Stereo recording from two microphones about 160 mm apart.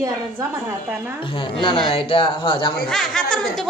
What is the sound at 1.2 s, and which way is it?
Speech, 30° left (ahead or behind).